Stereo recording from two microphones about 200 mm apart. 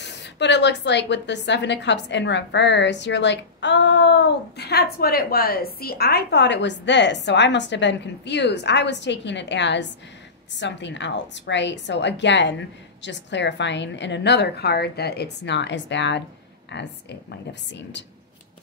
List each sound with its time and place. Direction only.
0.0 s a woman's voice: 60° left (ahead or behind)